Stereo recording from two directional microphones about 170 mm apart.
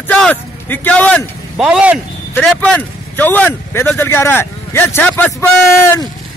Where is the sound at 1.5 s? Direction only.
5° right (ahead or behind).